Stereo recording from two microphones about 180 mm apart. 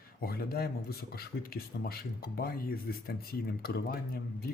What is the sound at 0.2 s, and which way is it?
Speech, 55° left (ahead or behind).